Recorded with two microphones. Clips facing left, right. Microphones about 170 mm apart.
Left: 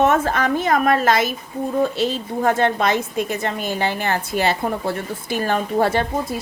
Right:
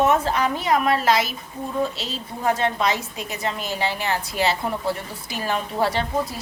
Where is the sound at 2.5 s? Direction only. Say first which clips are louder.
Left 4 dB; 55° left (ahead or behind).